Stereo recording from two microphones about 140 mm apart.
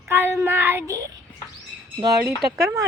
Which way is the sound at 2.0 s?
25° right (ahead or behind).